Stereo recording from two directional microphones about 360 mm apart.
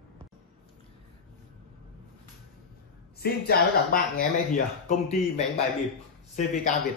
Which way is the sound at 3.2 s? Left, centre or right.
Left.